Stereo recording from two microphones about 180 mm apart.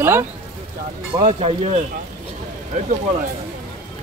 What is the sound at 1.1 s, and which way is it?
Speech, 30° right (ahead or behind).